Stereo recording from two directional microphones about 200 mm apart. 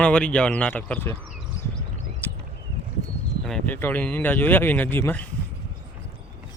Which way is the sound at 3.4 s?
5° left (ahead or behind).